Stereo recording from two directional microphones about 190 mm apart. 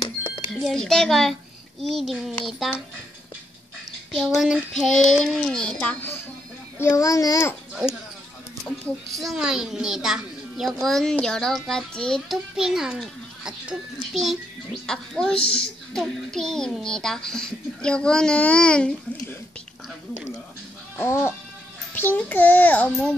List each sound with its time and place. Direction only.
0.5 s a child's voice: centre (ahead or behind)
4.2 s a child's voice: centre (ahead or behind); by 7.5 s 15° left (ahead or behind)
8.6 s a child's voice: centre (ahead or behind)
21.0 s a child's voice: 15° left (ahead or behind)